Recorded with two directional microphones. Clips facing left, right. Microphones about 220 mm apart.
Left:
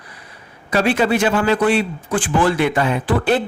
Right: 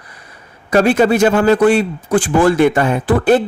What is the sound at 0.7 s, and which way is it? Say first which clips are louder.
A man's voice: right 5 dB; 45° right (ahead or behind).